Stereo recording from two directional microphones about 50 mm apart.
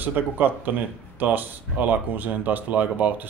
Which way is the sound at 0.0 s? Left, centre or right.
Right.